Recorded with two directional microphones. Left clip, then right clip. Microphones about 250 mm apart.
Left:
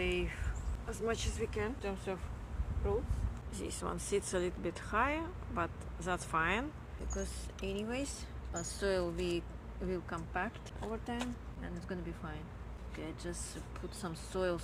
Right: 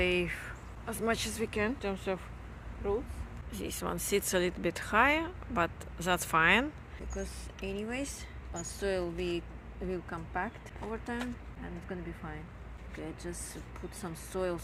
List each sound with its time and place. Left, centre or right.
0.0 s a sound: right
0.9 s speech: right
3.5 s speech: right
7.1 s speech: centre
13.0 s speech: centre